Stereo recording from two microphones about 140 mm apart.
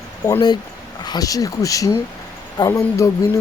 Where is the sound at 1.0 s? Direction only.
30° left (ahead or behind).